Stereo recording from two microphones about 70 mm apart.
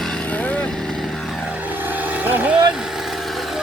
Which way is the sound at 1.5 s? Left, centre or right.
Right.